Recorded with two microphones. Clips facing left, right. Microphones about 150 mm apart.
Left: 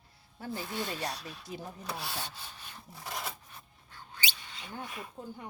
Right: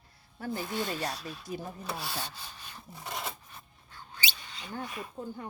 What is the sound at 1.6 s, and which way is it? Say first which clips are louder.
Rub: right 2 dB; 5° right (ahead or behind).